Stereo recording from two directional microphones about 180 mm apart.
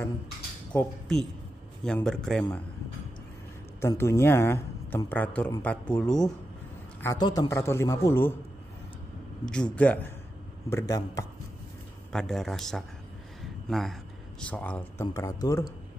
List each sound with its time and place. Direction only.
0.7 s a man's voice: 5° left (ahead or behind)
3.8 s speech: 15° left (ahead or behind)
7.0 s speech: 20° left (ahead or behind)
9.5 s speech: 5° left (ahead or behind)
10.7 s speech: 20° left (ahead or behind)
12.1 s a man's voice: 5° left (ahead or behind)
13.4 s a sound: centre (ahead or behind)
14.4 s speech: 10° left (ahead or behind)